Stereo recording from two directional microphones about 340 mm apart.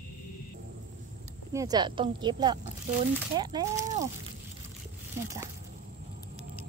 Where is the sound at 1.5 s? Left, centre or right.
Centre.